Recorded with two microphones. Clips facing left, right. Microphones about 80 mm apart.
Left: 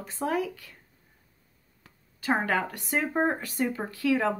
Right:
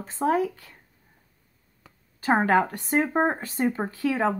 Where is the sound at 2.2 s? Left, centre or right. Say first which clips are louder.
Right 6 dB; right.